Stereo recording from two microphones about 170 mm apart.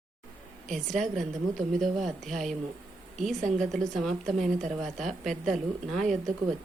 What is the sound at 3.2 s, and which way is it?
Speech, 45° right (ahead or behind).